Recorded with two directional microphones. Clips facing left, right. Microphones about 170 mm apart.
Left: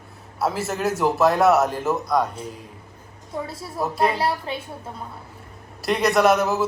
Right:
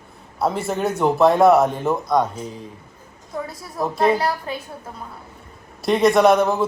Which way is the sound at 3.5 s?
30° left (ahead or behind).